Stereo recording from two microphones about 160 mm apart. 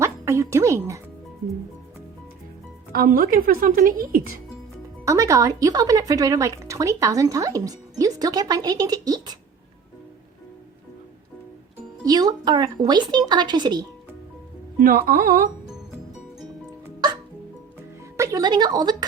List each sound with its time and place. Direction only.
0.0 s speech: 15° right (ahead or behind)
2.9 s a woman's voice: 65° right (ahead or behind)
5.0 s speech: 20° right (ahead or behind)
12.0 s speech: 25° right (ahead or behind)
14.8 s a woman's voice: 60° right (ahead or behind)
18.2 s speech: 20° right (ahead or behind)